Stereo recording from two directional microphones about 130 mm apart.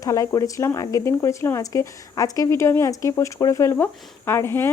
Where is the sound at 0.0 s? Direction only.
25° left (ahead or behind).